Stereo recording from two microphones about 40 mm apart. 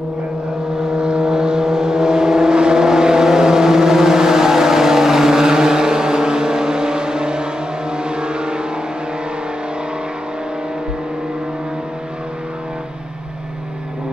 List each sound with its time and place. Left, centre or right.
0.8 s vehicle: right